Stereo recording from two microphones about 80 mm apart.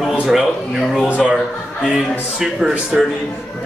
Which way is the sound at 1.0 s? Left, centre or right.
Centre.